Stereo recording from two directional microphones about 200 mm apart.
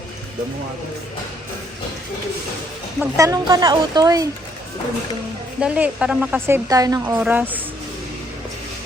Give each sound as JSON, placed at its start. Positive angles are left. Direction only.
{"t": 3.0, "sound": "a woman's voice", "side_deg": -15}
{"t": 5.5, "sound": "a woman's voice", "side_deg": -5}